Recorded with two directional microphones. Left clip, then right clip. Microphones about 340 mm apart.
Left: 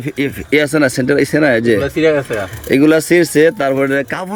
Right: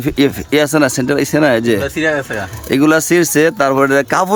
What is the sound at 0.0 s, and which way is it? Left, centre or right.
A man's voice, centre.